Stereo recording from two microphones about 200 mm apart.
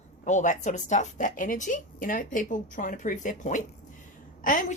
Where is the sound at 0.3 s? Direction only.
35° left (ahead or behind).